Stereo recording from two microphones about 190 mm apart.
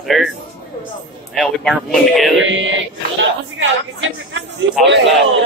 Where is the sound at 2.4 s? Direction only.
80° right.